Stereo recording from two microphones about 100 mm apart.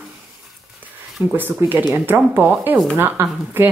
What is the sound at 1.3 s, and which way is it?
Speech, 20° right (ahead or behind).